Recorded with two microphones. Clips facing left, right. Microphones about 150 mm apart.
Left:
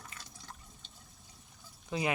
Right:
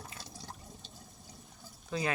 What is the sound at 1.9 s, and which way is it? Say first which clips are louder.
Speech: left 1 dB; 15° left (ahead or behind).